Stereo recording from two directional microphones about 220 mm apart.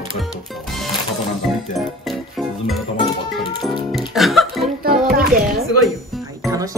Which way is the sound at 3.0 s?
20° left (ahead or behind).